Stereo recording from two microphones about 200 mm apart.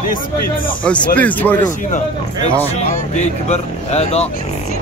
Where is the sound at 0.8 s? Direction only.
5° left (ahead or behind).